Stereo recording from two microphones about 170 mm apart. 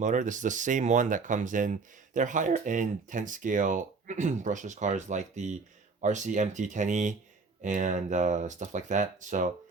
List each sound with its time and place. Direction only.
0.0 s speech: 50° right (ahead or behind)